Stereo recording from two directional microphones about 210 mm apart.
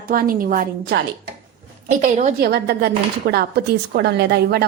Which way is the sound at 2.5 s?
50° right (ahead or behind).